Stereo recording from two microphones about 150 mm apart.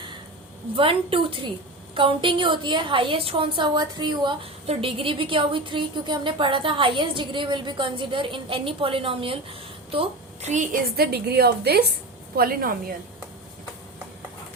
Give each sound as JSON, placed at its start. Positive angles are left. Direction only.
{"t": 0.8, "sound": "a woman's voice", "side_deg": -35}
{"t": 10.5, "sound": "a woman's voice", "side_deg": -60}
{"t": 12.4, "sound": "a woman's voice", "side_deg": -80}